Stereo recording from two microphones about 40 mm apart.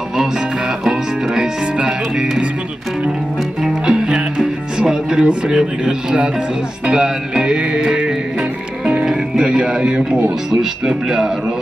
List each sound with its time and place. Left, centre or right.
0.8 s music: centre
3.6 s music: centre
4.7 s speech: centre
6.9 s music: centre
8.8 s music: centre
10.6 s speech: centre